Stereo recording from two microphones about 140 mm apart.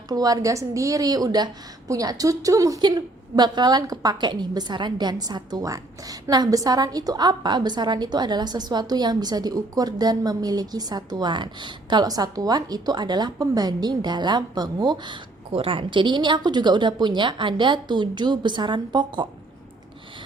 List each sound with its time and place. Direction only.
0.1 s a woman's voice: 25° right (ahead or behind)